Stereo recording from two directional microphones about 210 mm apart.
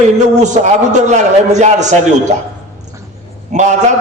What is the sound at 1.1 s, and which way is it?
A man's voice, 35° right (ahead or behind).